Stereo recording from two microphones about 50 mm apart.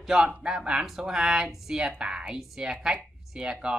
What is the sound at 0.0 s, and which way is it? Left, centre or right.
Speech, centre.